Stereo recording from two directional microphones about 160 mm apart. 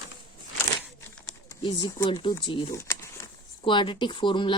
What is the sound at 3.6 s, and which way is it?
Speech, 30° left (ahead or behind).